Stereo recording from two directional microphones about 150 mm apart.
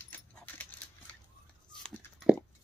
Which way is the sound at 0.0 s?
10° left (ahead or behind).